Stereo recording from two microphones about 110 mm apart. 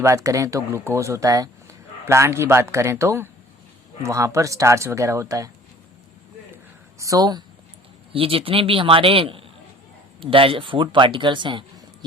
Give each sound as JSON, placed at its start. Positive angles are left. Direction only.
{"t": 0.0, "sound": "speech", "side_deg": -30}
{"t": 7.0, "sound": "speech", "side_deg": -35}
{"t": 8.1, "sound": "a man's voice", "side_deg": -55}